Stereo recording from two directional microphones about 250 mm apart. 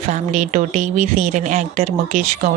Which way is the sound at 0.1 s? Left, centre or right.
Right.